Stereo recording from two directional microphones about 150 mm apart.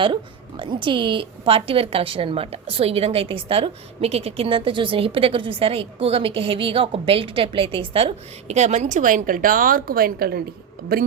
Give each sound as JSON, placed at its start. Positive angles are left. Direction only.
{"t": 0.0, "sound": "a woman's voice", "side_deg": -35}